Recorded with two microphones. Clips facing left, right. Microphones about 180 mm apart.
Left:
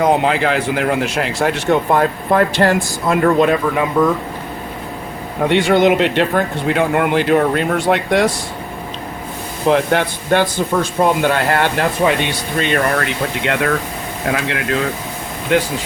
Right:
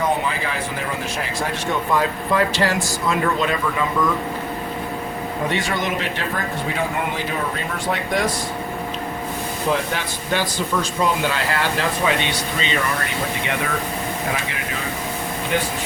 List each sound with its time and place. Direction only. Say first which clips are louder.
0.0 s a man's voice: left 8 dB; 75° left (ahead or behind); by 3.8 s 50° left (ahead or behind)
5.5 s a man's voice: left 13 dB; 70° left (ahead or behind)
9.6 s a man's voice: left 9 dB; 65° left (ahead or behind); by 15.7 s 85° left